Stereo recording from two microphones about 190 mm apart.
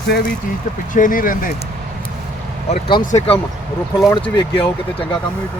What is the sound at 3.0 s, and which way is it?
Speech, 40° left (ahead or behind).